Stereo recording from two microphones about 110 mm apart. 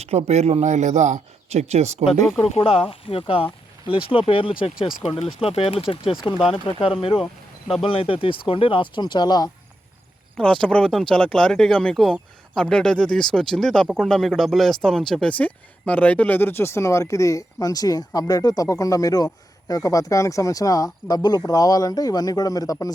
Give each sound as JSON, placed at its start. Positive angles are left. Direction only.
{"t": 0.0, "sound": "speech", "side_deg": -75}
{"t": 2.4, "sound": "speech", "side_deg": 60}
{"t": 10.3, "sound": "speech", "side_deg": 10}